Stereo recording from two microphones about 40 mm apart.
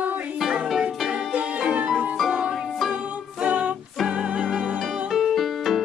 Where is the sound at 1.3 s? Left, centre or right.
Right.